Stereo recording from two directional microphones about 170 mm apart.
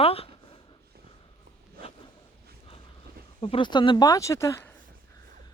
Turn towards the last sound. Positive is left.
turn(degrees=15)  # may be behind; listen again after turning